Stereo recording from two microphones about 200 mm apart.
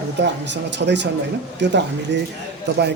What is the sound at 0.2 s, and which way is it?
A man's voice, 60° right (ahead or behind).